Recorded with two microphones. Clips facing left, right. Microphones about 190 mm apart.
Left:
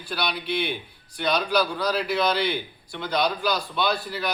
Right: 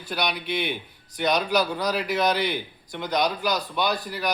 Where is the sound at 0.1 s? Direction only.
15° right (ahead or behind).